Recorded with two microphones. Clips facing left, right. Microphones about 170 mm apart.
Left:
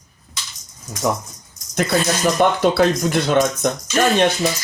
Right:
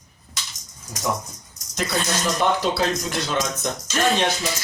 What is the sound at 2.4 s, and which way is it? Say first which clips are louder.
Speech: left 6 dB; 55° left (ahead or behind).